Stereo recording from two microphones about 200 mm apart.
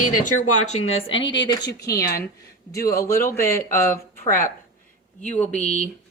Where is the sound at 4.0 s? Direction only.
45° left (ahead or behind).